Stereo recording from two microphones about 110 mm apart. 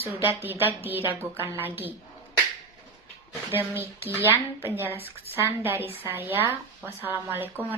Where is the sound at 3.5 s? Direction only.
20° right (ahead or behind).